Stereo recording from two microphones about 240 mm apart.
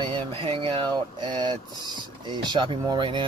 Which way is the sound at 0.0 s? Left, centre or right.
Right.